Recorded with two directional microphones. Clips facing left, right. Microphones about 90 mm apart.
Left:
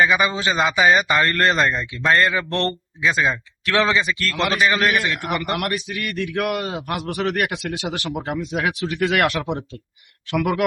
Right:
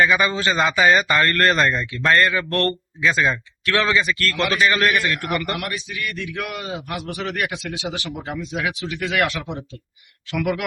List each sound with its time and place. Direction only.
0.0 s a man's voice: 10° left (ahead or behind)
3.0 s speech: 10° left (ahead or behind)
3.8 s a man's voice: 25° left (ahead or behind)
5.5 s a man's voice: 50° left (ahead or behind)
10.3 s speech: 40° left (ahead or behind)